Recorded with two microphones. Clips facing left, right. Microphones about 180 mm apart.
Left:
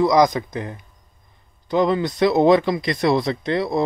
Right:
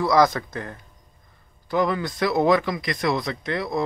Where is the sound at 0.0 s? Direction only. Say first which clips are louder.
Left 3 dB; 15° left (ahead or behind).